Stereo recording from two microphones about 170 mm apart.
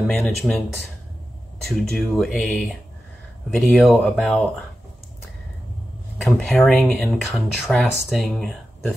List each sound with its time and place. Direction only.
0.0 s speech: 5° left (ahead or behind)
1.7 s speech: centre (ahead or behind)
6.4 s speech: centre (ahead or behind)